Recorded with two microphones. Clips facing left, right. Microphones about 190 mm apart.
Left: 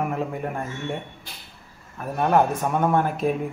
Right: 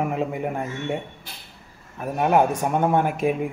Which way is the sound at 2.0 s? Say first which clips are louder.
Right 1 dB; 15° right (ahead or behind).